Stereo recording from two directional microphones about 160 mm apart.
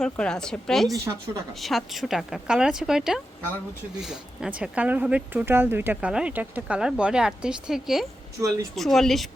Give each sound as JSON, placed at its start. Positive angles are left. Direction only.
{"t": 0.0, "sound": "speech", "side_deg": 5}
{"t": 0.9, "sound": "a woman's voice", "side_deg": -20}
{"t": 1.5, "sound": "speech", "side_deg": 0}